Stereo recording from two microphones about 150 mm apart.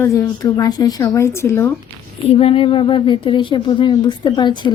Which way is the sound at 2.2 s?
40° left (ahead or behind).